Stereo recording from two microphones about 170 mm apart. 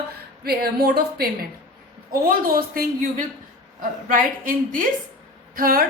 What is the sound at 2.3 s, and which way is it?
A woman's voice, 55° right (ahead or behind).